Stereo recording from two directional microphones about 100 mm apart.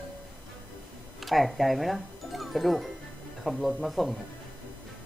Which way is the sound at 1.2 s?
Centre (ahead or behind).